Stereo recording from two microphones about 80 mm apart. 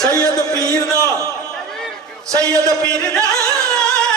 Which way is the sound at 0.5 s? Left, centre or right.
Centre.